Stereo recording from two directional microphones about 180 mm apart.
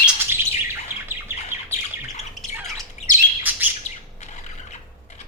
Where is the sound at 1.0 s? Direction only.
10° right (ahead or behind).